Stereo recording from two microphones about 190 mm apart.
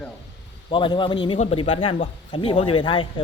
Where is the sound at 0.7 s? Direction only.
25° left (ahead or behind).